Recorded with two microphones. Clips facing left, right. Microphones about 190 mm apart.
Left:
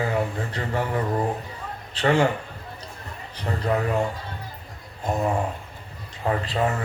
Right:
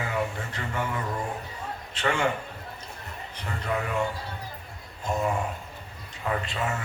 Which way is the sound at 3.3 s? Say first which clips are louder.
Left 6 dB; 35° left (ahead or behind).